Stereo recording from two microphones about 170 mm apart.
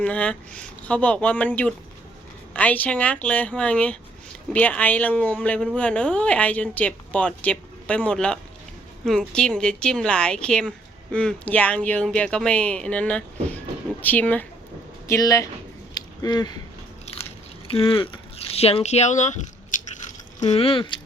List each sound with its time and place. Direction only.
0.0 s speech: 5° left (ahead or behind)
16.0 s a sound: 25° left (ahead or behind)
17.7 s speech: 30° left (ahead or behind)
19.7 s biting: 50° left (ahead or behind)
20.5 s speech: 35° left (ahead or behind)